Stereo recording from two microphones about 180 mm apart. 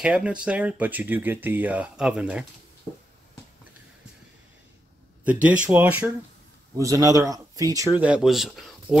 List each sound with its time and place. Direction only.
0.0 s speech: 5° right (ahead or behind)
5.2 s speech: 5° right (ahead or behind)
8.0 s a man's voice: 5° right (ahead or behind)